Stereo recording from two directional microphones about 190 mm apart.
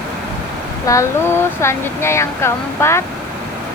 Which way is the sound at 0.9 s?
15° left (ahead or behind).